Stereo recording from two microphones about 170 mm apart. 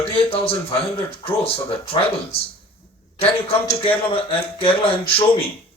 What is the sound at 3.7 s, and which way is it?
Speech, 35° left (ahead or behind).